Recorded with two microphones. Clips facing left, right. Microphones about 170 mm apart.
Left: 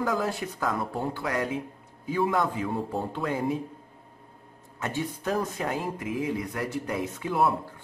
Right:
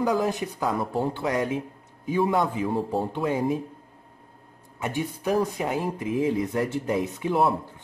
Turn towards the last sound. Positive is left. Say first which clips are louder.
# right 2 dB
turn(degrees=-25)  # may be behind; listen again after turning